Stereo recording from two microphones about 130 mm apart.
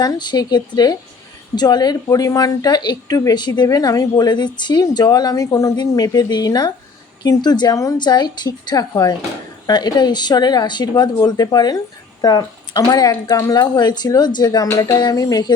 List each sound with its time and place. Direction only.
0.0 s a woman's voice: 35° left (ahead or behind)